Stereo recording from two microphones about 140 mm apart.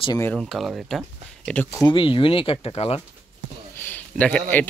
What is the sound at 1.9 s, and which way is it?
Speech, 35° left (ahead or behind).